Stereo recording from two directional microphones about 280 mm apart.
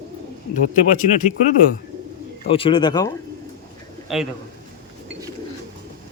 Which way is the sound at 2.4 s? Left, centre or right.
Centre.